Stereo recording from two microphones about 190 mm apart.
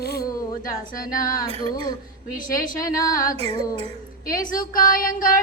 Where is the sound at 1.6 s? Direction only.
20° left (ahead or behind).